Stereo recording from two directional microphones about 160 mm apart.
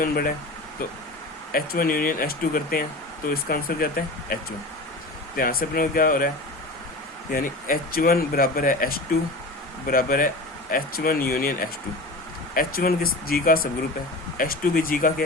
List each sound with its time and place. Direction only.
0.0 s speech: 65° left (ahead or behind)
1.5 s speech: 65° left (ahead or behind)
5.4 s speech: 65° left (ahead or behind)
12.5 s speech: 65° left (ahead or behind)